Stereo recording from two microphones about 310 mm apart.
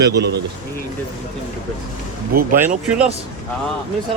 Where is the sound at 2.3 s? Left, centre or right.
Right.